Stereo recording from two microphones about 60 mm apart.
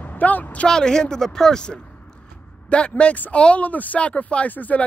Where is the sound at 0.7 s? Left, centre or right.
Centre.